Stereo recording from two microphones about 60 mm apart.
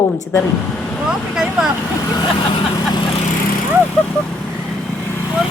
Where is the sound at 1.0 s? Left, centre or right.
Centre.